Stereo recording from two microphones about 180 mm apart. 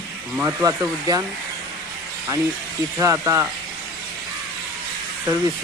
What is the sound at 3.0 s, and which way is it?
Speech, 15° right (ahead or behind).